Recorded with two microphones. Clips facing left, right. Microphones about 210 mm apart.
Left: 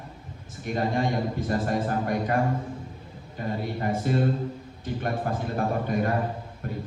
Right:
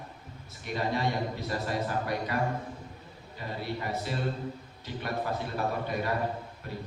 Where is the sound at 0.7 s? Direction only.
50° left (ahead or behind).